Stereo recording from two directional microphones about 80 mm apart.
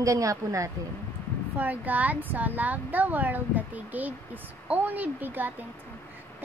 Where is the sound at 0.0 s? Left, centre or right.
Right.